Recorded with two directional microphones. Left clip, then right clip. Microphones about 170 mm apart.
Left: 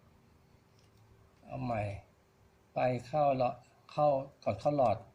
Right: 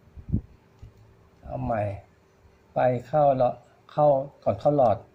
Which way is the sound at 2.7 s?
15° right (ahead or behind).